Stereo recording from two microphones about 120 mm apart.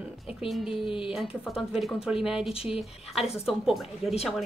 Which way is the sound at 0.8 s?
45° left (ahead or behind).